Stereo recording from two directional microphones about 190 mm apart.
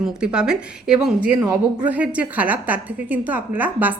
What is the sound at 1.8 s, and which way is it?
A woman's voice, 5° right (ahead or behind).